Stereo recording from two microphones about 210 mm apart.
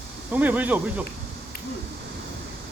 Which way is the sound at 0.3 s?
10° right (ahead or behind).